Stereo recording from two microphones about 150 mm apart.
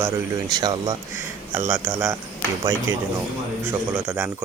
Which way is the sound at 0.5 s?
30° right (ahead or behind).